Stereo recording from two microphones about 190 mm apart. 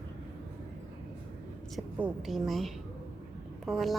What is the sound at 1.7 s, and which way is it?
A woman's voice, 5° right (ahead or behind).